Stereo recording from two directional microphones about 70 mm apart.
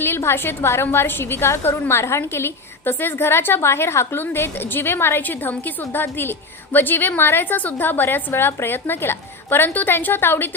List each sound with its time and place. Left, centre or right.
0.0 s a woman's voice: left